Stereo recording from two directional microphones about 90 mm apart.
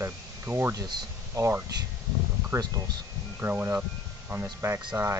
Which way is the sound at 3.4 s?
25° right (ahead or behind).